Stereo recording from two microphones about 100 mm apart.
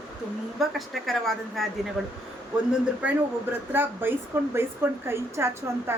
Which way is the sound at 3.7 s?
20° right (ahead or behind).